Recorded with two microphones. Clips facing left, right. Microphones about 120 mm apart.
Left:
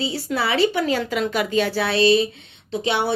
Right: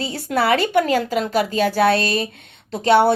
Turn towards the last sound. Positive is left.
turn(degrees=-50)  # may be behind; listen again after turning